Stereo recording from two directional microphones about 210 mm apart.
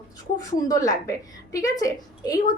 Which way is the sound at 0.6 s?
15° left (ahead or behind).